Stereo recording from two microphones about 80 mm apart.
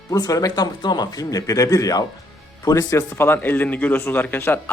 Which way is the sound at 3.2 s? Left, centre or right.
Left.